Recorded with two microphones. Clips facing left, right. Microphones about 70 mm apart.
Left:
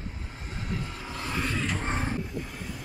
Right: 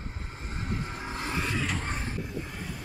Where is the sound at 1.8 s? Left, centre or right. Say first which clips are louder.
Left 4 dB; left.